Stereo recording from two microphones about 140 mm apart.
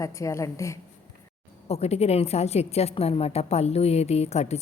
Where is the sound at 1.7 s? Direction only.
50° left (ahead or behind).